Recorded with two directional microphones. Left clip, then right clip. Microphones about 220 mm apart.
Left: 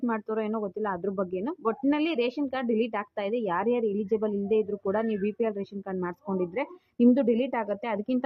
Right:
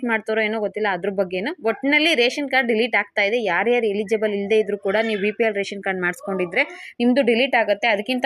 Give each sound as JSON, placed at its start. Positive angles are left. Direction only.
{"t": 0.1, "sound": "speech", "side_deg": -5}